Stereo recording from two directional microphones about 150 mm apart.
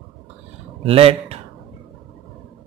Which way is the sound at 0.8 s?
40° right (ahead or behind).